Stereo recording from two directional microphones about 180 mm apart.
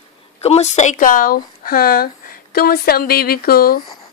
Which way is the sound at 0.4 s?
35° left (ahead or behind).